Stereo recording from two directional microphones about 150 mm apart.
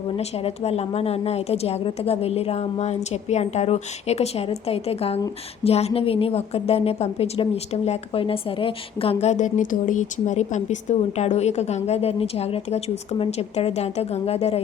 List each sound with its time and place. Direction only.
0.2 s a woman's voice: 45° left (ahead or behind)